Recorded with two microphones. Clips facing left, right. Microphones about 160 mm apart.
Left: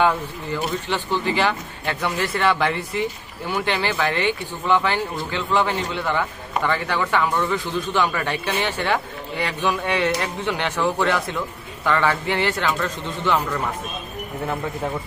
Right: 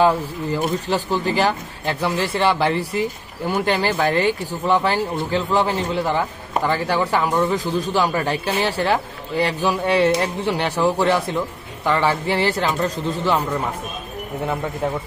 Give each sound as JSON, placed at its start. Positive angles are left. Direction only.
{"t": 0.0, "sound": "a man's voice", "side_deg": -35}